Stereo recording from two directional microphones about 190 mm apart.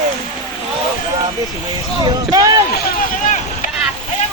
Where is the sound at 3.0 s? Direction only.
40° left (ahead or behind).